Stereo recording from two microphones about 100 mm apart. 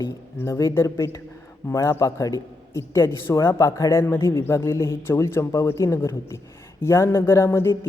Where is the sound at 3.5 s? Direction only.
35° left (ahead or behind).